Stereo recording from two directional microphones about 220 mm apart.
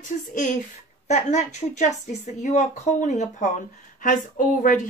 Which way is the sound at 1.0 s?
30° left (ahead or behind).